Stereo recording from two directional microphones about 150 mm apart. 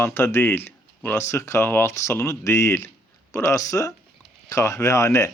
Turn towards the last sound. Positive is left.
turn(degrees=20)  # may be behind; listen again after turning